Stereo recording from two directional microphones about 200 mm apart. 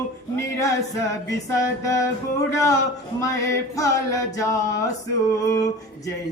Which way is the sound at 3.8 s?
15° left (ahead or behind).